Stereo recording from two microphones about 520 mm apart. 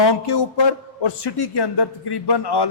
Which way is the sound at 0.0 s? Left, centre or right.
Left.